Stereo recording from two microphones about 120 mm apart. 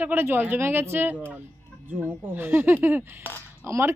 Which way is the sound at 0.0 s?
15° right (ahead or behind).